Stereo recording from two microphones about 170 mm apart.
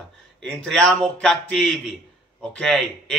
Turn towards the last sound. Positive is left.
turn(degrees=5)  # may be behind; listen again after turning